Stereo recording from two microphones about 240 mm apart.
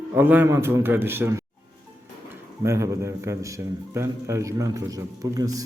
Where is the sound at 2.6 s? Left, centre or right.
Centre.